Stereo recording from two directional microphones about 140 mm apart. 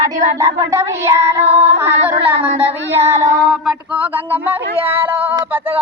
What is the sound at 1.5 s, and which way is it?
Music, 50° right (ahead or behind).